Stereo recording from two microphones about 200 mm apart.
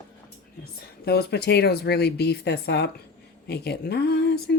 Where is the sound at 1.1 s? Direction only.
55° left (ahead or behind).